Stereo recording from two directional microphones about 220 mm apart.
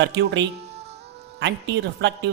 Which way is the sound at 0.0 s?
55° right (ahead or behind).